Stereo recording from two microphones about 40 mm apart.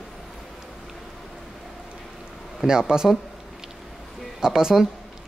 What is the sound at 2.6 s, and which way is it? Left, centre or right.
Speech, centre.